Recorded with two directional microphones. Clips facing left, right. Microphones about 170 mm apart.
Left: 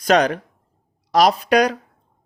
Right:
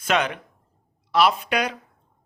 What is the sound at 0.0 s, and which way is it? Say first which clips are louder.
Speech: left 7 dB; 40° left (ahead or behind).